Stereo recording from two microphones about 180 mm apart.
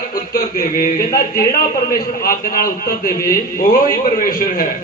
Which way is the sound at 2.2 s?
55° left (ahead or behind).